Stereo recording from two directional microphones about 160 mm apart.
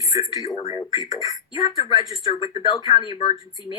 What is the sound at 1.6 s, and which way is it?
Speech, 25° left (ahead or behind).